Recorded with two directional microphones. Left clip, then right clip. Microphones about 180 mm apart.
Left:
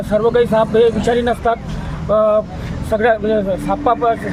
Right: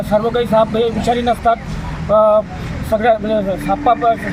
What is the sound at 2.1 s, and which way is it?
Speech, 5° left (ahead or behind).